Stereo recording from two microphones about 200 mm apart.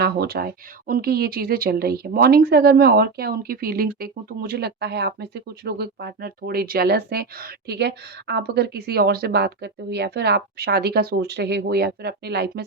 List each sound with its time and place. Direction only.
0.0 s speech: 50° right (ahead or behind)